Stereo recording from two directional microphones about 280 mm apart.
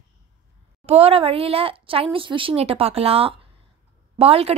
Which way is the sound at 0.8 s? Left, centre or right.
Right.